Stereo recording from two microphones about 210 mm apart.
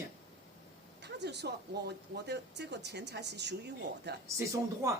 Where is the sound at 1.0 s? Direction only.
55° right (ahead or behind).